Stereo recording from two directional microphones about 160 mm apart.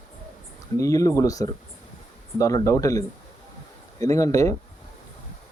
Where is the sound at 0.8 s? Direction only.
20° left (ahead or behind).